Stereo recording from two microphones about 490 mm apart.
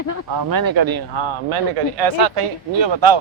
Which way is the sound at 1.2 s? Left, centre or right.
Right.